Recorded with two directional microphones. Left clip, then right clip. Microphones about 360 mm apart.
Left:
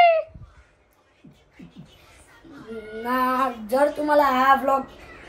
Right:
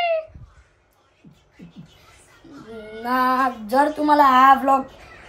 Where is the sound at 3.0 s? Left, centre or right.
Centre.